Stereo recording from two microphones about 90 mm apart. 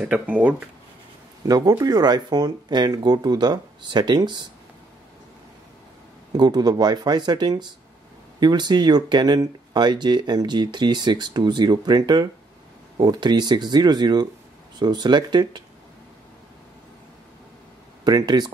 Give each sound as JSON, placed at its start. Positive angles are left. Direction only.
{"t": 0.0, "sound": "speech", "side_deg": -15}
{"t": 1.5, "sound": "speech", "side_deg": -45}
{"t": 6.3, "sound": "speech", "side_deg": -50}
{"t": 18.0, "sound": "speech", "side_deg": -50}